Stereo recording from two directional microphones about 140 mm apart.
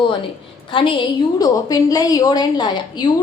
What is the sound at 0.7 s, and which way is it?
A woman's voice, 35° left (ahead or behind).